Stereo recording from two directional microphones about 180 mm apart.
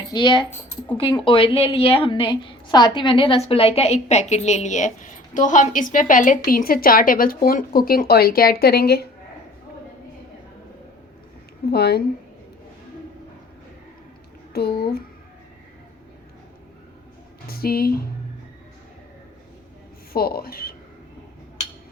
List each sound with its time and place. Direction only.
0.1 s a woman's voice: 25° left (ahead or behind); by 9.0 s 60° left (ahead or behind)
11.7 s speech: 65° left (ahead or behind)
14.5 s speech: 60° left (ahead or behind)
17.4 s speech: 55° left (ahead or behind)
20.1 s speech: 55° left (ahead or behind)